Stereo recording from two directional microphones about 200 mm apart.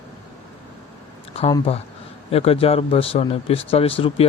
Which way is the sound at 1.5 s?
25° left (ahead or behind).